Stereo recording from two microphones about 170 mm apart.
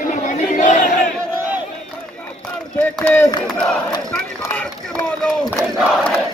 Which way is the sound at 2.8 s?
10° left (ahead or behind).